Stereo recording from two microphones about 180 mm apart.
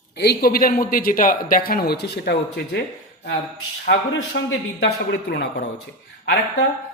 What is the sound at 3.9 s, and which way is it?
A man's voice, 80° left.